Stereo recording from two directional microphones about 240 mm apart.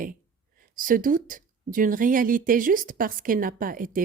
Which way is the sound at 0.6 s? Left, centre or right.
Right.